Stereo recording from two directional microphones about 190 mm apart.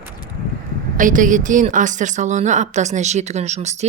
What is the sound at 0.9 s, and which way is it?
A woman's voice, 45° right (ahead or behind).